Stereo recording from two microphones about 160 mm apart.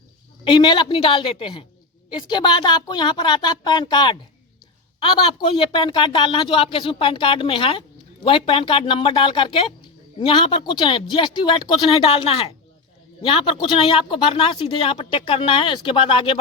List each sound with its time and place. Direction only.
0.4 s a woman's voice: 30° left (ahead or behind)